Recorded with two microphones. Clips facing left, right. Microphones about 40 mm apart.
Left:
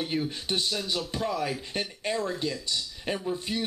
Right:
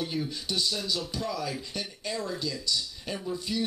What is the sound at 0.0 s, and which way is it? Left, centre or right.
Speech, left.